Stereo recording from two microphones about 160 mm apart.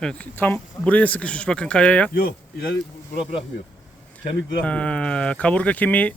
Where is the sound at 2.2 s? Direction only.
65° left (ahead or behind).